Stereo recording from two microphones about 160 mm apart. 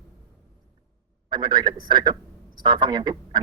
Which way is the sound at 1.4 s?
25° right (ahead or behind).